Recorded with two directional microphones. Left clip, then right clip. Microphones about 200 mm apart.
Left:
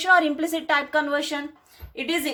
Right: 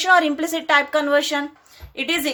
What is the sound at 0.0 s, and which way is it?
A woman's voice, 5° right (ahead or behind).